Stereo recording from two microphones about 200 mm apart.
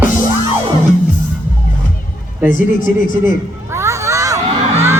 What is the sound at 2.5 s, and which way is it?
Speech, 40° left (ahead or behind).